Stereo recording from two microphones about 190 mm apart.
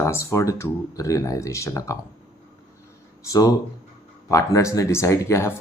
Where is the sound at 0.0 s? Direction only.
15° left (ahead or behind).